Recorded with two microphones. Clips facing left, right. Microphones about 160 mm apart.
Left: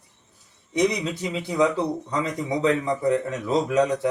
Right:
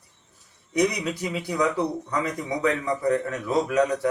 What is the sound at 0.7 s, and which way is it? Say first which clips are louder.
A man's voice: left 1 dB; 25° left (ahead or behind).